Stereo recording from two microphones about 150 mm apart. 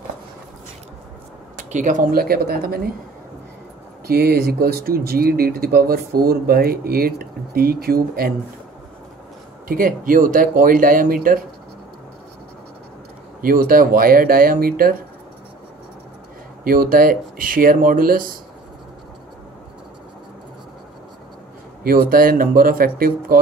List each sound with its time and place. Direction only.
1.6 s speech: 55° right (ahead or behind); by 2.8 s 90° right
4.1 s speech: 90° right
9.7 s speech: 65° right (ahead or behind)
13.4 s speech: 75° right (ahead or behind)
16.6 s speech: 75° right (ahead or behind)
21.8 s speech: 85° right